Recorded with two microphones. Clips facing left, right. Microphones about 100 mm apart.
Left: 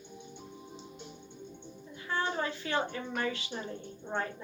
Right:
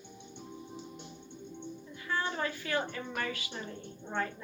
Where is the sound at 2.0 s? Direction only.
25° left (ahead or behind).